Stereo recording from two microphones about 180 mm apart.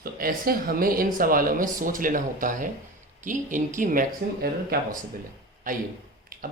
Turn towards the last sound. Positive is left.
turn(degrees=-50)  # may be behind; listen again after turning